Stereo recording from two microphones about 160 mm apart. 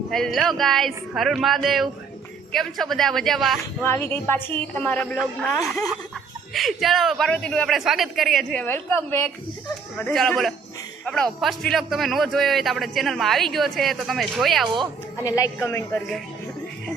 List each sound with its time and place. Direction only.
0.1 s a man's voice: centre (ahead or behind)
3.8 s a woman's voice: 15° left (ahead or behind)
5.1 s a man's voice: 5° right (ahead or behind)
6.5 s a man's voice: centre (ahead or behind)
15.5 s a woman's voice: 15° left (ahead or behind)